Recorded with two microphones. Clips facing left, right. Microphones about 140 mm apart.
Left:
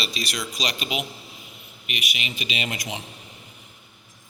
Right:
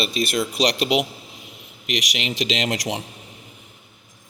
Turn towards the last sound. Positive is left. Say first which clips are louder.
# right 7 dB
turn(degrees=-70)  # may be behind; listen again after turning